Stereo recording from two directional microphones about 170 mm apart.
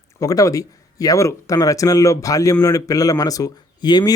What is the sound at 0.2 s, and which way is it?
Speech, 20° left (ahead or behind).